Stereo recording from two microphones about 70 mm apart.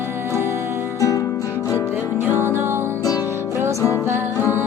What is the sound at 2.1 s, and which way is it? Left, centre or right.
Music, right.